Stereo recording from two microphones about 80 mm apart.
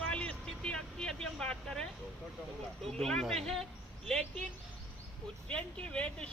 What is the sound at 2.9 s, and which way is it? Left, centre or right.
Speech, centre.